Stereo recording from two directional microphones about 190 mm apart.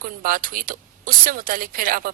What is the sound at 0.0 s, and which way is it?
A woman's voice, 45° right (ahead or behind).